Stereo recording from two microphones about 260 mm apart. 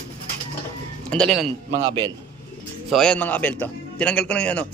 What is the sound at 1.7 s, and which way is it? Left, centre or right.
Speech, right.